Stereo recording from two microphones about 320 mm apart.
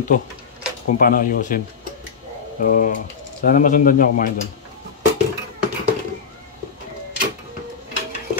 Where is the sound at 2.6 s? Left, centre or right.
Left.